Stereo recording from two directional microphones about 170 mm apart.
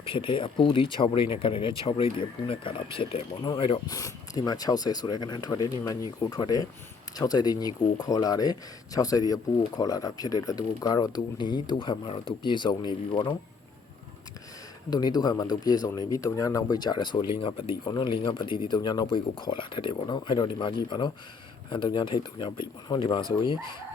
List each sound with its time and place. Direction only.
0.0 s speech: 30° left (ahead or behind)
14.8 s speech: 25° left (ahead or behind)